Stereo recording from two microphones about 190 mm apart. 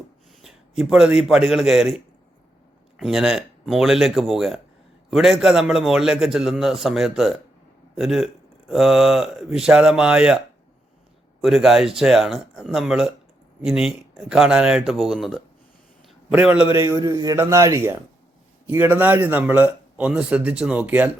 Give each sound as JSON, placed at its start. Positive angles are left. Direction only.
{"t": 0.4, "sound": "a man's voice", "side_deg": 0}
{"t": 3.0, "sound": "a man's voice", "side_deg": 0}